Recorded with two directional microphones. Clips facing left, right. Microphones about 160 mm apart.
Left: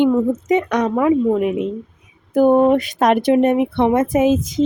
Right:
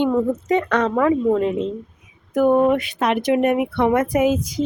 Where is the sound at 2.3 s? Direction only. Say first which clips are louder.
Left 3 dB; 25° left (ahead or behind).